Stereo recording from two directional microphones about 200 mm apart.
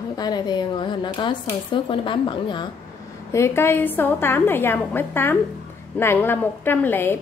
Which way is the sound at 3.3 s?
15° left (ahead or behind).